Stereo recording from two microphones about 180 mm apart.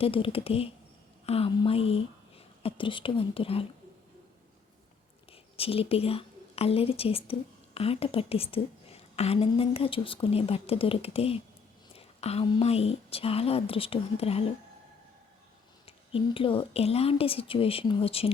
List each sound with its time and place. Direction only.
0.0 s speech: 30° left (ahead or behind)
5.3 s a woman's voice: 30° left (ahead or behind)
15.9 s speech: 30° left (ahead or behind)